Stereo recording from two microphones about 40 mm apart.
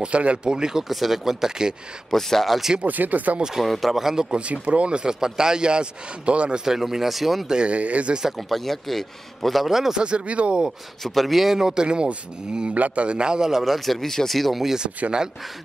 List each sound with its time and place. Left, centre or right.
0.0 s speech: right; by 1.8 s centre
2.0 s speech: centre
2.4 s a man's voice: centre
2.8 s speech: right
3.6 s speech: centre
4.4 s speech: right
6.6 s speech: centre
7.4 s speech: right
7.7 s speech: right
8.3 s a man's voice: centre
9.9 s speech: right
11.1 s speech: centre; by 13.5 s right
13.5 s a man's voice: centre
14.6 s speech: centre